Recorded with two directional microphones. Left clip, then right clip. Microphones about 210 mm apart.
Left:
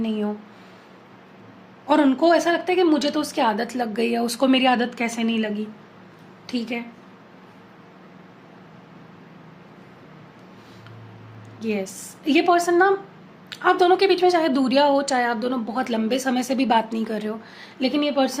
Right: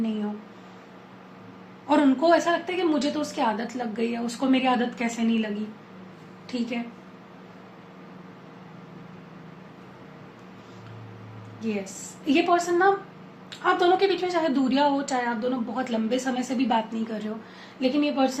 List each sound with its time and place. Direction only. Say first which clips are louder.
0.0 s a woman's voice: left 4 dB; 50° left (ahead or behind)
1.9 s a woman's voice: left 3 dB; 55° left (ahead or behind)
6.5 s a woman's voice: left 3 dB; 55° left (ahead or behind)
11.6 s a woman's voice: left 5 dB; 55° left (ahead or behind)